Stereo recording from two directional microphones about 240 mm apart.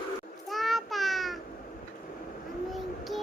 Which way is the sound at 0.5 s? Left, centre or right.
Centre.